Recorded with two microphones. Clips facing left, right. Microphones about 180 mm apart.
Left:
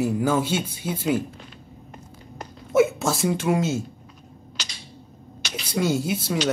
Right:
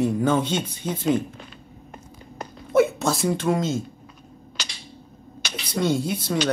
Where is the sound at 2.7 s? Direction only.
Centre (ahead or behind).